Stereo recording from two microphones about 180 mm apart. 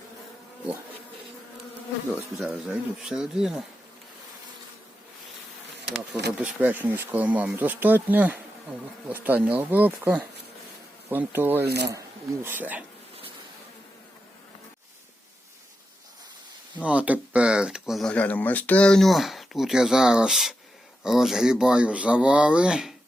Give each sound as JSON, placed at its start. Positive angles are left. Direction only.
{"t": 2.1, "sound": "speech", "side_deg": -5}
{"t": 6.3, "sound": "speech", "side_deg": -10}
{"t": 11.6, "sound": "speech", "side_deg": -65}
{"t": 11.9, "sound": "speech", "side_deg": -15}
{"t": 16.7, "sound": "speech", "side_deg": -5}